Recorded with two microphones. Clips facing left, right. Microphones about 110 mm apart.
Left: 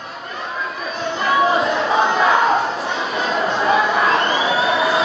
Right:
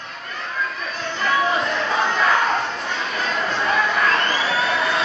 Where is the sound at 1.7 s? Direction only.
30° left (ahead or behind).